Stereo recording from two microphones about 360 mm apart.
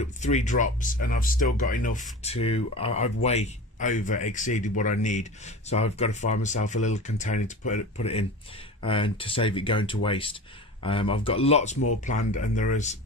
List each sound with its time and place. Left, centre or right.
0.0 s speech: centre